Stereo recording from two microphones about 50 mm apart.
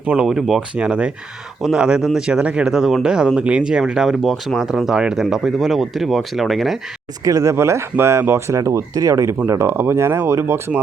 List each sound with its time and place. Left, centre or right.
0.3 s speech: centre
0.8 s speech: right
1.7 s speech: centre
2.7 s speech: centre
4.2 s speech: centre
7.4 s speech: right
8.3 s speech: right
9.5 s speech: right
10.2 s speech: right